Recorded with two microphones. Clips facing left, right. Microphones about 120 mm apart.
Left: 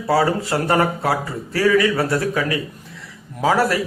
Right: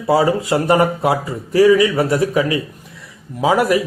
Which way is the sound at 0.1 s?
20° right (ahead or behind).